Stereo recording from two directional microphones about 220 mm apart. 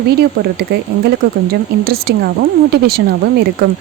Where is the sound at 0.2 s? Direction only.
45° right (ahead or behind).